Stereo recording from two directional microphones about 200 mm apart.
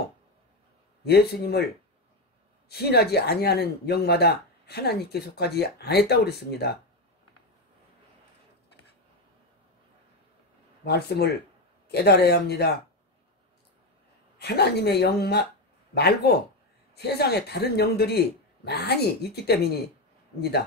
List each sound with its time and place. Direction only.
1.0 s speech: 55° left (ahead or behind)
2.7 s speech: 55° left (ahead or behind)
10.8 s speech: 55° left (ahead or behind)
14.4 s speech: 55° left (ahead or behind)